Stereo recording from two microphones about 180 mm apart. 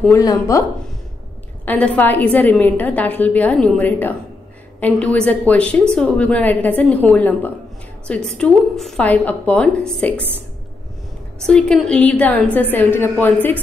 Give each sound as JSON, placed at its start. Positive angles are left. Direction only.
{"t": 0.2, "sound": "a woman's voice", "side_deg": 20}
{"t": 1.7, "sound": "a woman's voice", "side_deg": 10}
{"t": 11.4, "sound": "a woman's voice", "side_deg": 5}